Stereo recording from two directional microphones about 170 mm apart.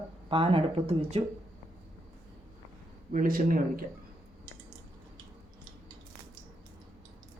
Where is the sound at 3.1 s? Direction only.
55° right (ahead or behind).